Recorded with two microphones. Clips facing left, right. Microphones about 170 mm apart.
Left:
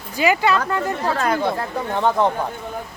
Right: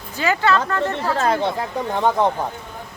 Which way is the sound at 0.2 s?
15° left (ahead or behind).